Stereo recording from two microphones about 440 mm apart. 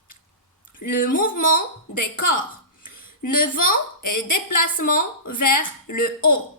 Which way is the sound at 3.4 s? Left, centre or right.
Centre.